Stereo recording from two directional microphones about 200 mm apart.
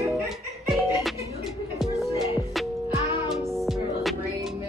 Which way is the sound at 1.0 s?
Centre (ahead or behind).